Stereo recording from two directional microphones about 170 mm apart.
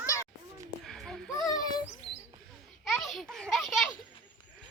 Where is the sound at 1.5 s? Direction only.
25° left (ahead or behind).